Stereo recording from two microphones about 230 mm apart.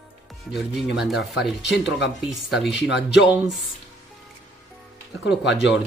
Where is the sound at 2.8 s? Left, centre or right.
Left.